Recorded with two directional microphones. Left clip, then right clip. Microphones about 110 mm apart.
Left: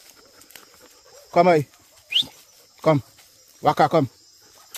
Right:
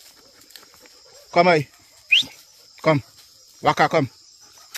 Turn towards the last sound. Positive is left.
turn(degrees=15)  # may be behind; listen again after turning